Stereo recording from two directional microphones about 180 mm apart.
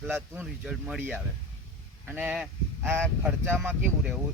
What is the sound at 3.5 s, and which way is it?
Speech, 10° right (ahead or behind).